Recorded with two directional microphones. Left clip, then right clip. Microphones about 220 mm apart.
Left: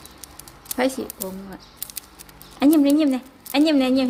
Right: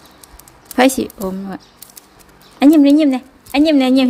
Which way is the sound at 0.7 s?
40° right (ahead or behind).